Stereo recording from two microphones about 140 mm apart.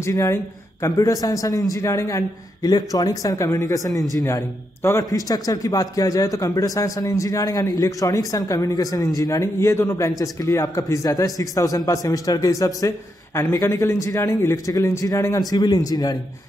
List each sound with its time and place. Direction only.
0.0 s a man's voice: 20° left (ahead or behind)